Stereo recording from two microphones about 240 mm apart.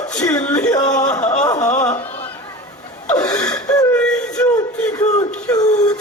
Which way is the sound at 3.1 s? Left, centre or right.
Centre.